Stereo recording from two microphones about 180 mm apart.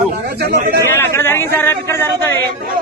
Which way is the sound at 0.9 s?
10° left (ahead or behind).